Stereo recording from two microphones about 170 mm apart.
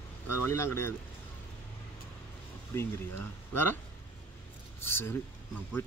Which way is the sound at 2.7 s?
15° left (ahead or behind).